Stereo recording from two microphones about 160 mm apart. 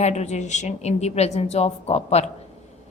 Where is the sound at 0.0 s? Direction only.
45° left (ahead or behind).